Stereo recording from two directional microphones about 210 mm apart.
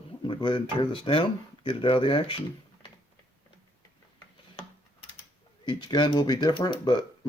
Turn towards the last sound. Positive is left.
turn(degrees=20)  # may be behind; listen again after turning